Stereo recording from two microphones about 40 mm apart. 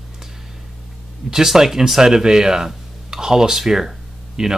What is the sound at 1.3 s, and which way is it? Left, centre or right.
Speech, centre.